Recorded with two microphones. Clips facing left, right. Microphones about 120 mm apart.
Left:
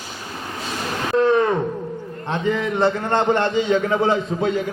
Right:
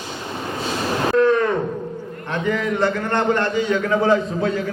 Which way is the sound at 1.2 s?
20° left (ahead or behind).